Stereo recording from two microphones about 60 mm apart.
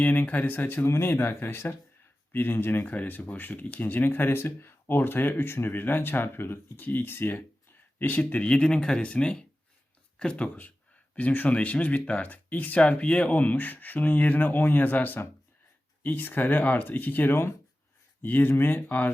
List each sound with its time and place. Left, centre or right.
0.0 s speech: left
0.9 s speech: left